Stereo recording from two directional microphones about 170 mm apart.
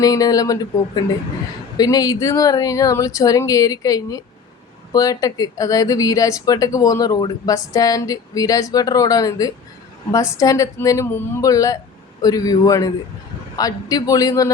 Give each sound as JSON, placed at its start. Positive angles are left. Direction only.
{"t": 0.0, "sound": "a woman's voice", "side_deg": 20}